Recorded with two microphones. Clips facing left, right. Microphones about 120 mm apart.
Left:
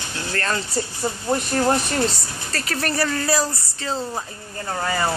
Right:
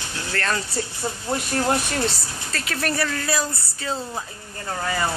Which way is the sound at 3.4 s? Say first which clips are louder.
Left 2 dB; 30° left (ahead or behind).